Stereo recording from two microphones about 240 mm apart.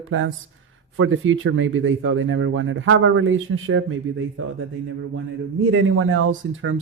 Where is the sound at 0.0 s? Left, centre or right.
Right.